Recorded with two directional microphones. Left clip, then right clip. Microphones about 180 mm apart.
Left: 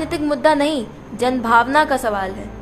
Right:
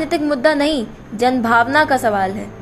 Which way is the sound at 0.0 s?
10° right (ahead or behind).